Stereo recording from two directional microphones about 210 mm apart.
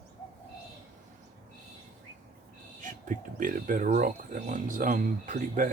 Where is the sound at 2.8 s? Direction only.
40° right (ahead or behind).